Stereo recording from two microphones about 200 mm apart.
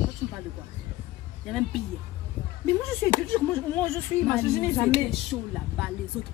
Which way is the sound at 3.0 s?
10° left (ahead or behind).